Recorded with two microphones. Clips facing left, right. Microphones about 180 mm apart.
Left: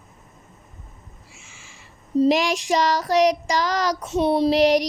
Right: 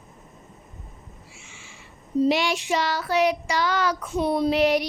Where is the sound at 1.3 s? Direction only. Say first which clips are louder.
Right 1 dB; 40° left (ahead or behind).